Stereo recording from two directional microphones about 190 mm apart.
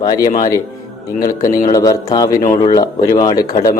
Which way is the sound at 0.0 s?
20° left (ahead or behind).